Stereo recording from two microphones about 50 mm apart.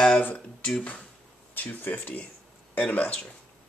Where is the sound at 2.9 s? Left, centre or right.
Left.